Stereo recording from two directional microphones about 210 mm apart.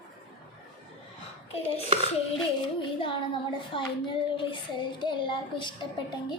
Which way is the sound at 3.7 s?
25° left (ahead or behind).